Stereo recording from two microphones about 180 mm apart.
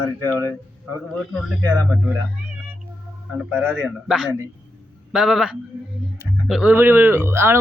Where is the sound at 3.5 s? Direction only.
10° right (ahead or behind).